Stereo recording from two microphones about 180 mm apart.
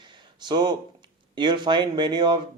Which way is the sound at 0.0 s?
25° right (ahead or behind).